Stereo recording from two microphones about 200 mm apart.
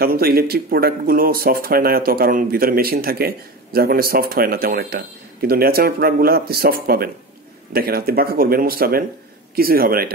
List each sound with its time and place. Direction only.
0.0 s speech: 50° right (ahead or behind)